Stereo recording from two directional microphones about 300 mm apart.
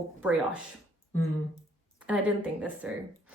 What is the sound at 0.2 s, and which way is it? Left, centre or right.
Speech, centre.